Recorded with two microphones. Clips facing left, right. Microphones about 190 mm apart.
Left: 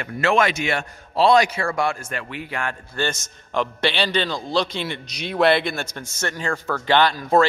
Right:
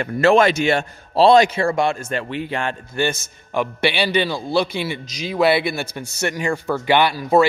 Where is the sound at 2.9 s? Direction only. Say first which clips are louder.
Right 4 dB; 10° right (ahead or behind).